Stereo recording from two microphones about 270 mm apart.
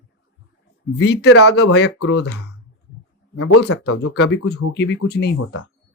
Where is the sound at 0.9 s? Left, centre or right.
Left.